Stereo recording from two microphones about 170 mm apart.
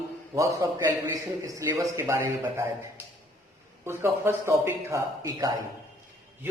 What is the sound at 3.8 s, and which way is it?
A man's voice, 15° right (ahead or behind).